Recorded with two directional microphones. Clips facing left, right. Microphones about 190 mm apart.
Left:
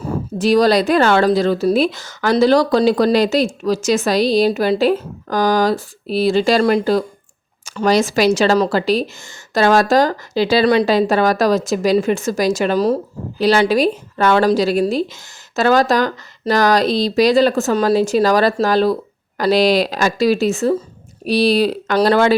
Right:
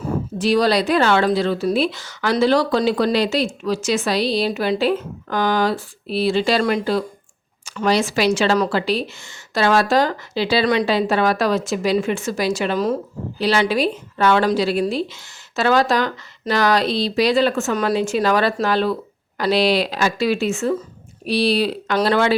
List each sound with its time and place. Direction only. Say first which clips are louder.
0.3 s speech: left 4 dB; 45° left (ahead or behind)